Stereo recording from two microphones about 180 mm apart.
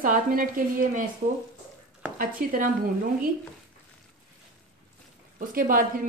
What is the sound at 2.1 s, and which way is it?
Speech, 50° right (ahead or behind).